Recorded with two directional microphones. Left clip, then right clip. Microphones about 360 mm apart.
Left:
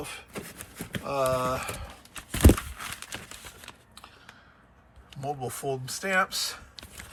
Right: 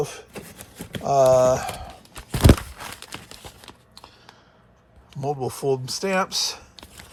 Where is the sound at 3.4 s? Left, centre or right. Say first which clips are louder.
Right 2 dB; centre.